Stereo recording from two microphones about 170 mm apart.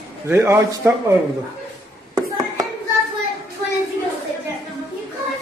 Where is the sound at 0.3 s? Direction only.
15° right (ahead or behind).